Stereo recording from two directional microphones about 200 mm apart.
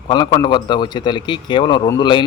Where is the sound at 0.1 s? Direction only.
20° left (ahead or behind).